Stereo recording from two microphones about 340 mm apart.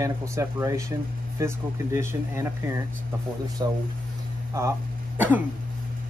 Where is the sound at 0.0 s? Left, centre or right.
Centre.